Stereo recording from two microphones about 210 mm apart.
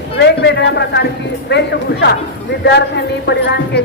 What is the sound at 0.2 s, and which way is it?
A woman's voice, 55° left (ahead or behind).